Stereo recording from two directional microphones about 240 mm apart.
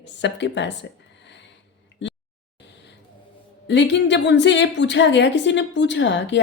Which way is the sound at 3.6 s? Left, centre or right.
Left.